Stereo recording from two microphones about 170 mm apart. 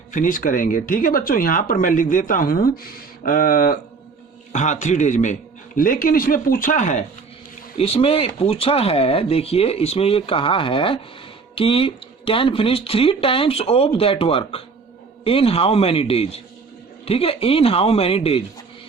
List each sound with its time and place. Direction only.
0.1 s speech: 50° left (ahead or behind)
4.5 s a man's voice: 45° left (ahead or behind)
7.8 s speech: 35° left (ahead or behind)